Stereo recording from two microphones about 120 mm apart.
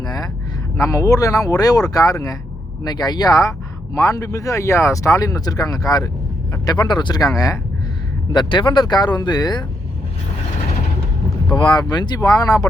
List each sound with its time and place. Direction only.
0.0 s a sound: 35° left (ahead or behind)
0.8 s speech: 30° left (ahead or behind)
8.3 s speech: 40° left (ahead or behind)
11.4 s speech: 40° left (ahead or behind)